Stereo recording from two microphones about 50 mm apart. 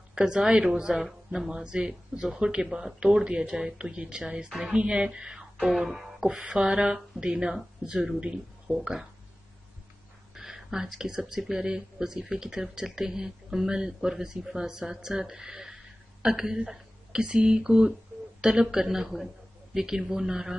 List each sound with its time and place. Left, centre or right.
0.1 s a woman's voice: centre
4.5 s speech: centre
4.7 s speech: centre
5.6 s music: centre
6.4 s speech: centre
10.3 s speech: centre